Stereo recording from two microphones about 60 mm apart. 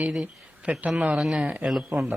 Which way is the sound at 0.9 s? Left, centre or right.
Centre.